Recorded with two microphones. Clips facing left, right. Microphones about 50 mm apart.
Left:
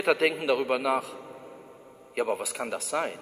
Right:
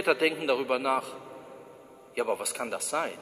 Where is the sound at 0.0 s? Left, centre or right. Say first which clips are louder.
Left 1 dB; centre.